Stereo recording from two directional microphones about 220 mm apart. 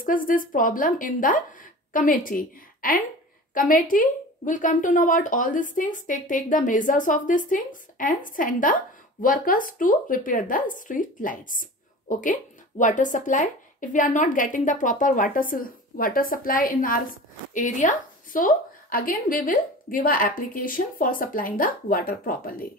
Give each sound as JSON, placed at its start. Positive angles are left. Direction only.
{"t": 0.0, "sound": "a woman's voice", "side_deg": 40}